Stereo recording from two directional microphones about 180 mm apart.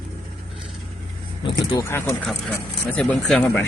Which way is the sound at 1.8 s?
15° left (ahead or behind).